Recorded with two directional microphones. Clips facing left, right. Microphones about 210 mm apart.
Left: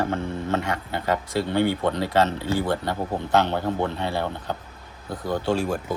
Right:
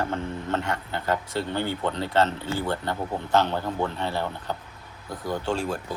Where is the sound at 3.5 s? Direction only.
20° left (ahead or behind).